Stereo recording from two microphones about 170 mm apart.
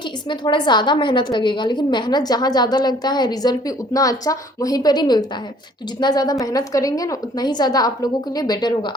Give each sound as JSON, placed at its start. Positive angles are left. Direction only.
{"t": 0.3, "sound": "a woman's voice", "side_deg": 25}